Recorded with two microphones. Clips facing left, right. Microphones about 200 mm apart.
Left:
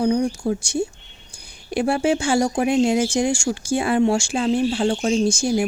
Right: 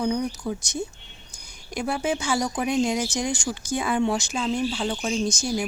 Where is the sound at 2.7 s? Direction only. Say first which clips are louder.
Left 6 dB; 25° left (ahead or behind).